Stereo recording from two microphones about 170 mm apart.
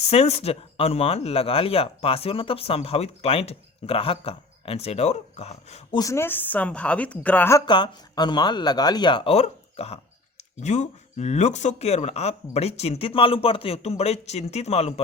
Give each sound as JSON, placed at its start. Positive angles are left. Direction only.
{"t": 0.1, "sound": "speech", "side_deg": 35}
{"t": 6.0, "sound": "a woman's voice", "side_deg": 15}
{"t": 7.6, "sound": "speech", "side_deg": 25}